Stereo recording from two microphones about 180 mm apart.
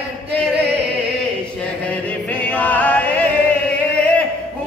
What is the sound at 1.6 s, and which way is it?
Music, 5° left (ahead or behind).